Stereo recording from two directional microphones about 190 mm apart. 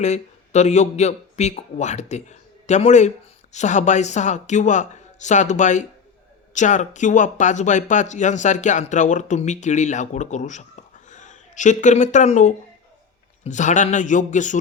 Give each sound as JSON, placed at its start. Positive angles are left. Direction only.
{"t": 0.0, "sound": "speech", "side_deg": 35}